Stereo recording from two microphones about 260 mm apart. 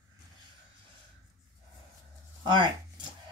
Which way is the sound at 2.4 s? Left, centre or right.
Centre.